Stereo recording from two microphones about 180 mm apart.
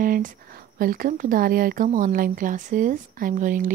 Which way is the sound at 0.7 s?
50° right (ahead or behind).